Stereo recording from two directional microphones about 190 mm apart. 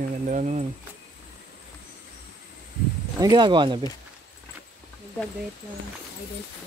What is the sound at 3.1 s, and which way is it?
Speech, 20° right (ahead or behind).